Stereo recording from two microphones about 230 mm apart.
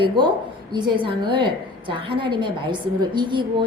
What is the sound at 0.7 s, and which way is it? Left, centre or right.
A woman's voice, centre.